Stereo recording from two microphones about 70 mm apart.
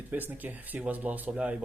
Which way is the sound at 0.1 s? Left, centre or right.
Right.